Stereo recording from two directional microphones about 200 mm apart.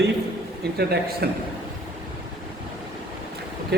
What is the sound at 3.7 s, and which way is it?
Speech, 55° right (ahead or behind).